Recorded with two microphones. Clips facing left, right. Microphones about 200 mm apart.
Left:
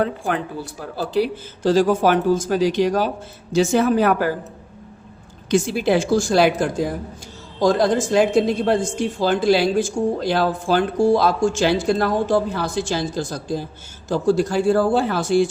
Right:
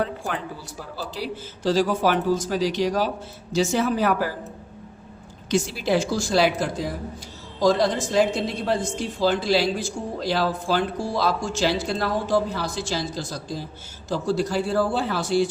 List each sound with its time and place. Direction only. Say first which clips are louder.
0.0 s speech: left 5 dB; 55° left (ahead or behind)
5.5 s speech: left 5 dB; 55° left (ahead or behind)